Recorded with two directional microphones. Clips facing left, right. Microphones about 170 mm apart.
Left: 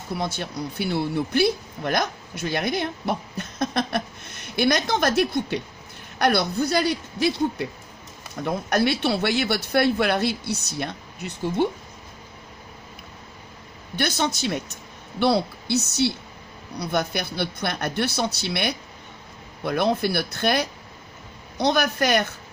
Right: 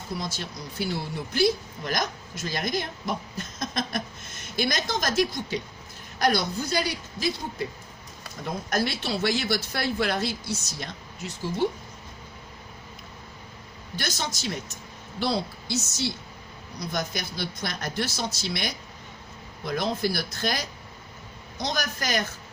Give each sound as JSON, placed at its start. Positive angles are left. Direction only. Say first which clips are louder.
{"t": 0.2, "sound": "speech", "louder": "left 6 dB", "side_deg": 60}
{"t": 8.4, "sound": "speech", "louder": "left 6 dB", "side_deg": 65}
{"t": 13.9, "sound": "speech", "louder": "left 8 dB", "side_deg": 60}